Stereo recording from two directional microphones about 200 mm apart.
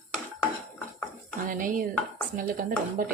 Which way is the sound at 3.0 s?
45° right (ahead or behind).